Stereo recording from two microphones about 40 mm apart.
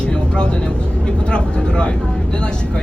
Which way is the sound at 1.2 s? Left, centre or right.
Left.